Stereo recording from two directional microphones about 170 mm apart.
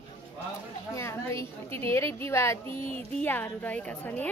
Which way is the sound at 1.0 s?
15° left (ahead or behind).